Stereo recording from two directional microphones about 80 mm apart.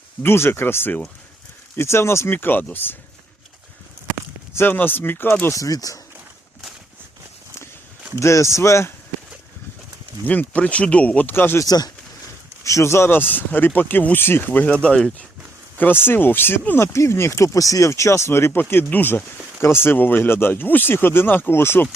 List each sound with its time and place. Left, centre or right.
0.2 s speech: left
4.5 s speech: left
5.5 s speech: left
8.2 s speech: left
10.2 s speech: centre
11.6 s speech: left
12.6 s speech: left; by 15.3 s centre
15.8 s speech: left